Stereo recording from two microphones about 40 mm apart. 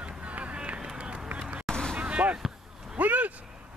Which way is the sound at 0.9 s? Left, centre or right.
Right.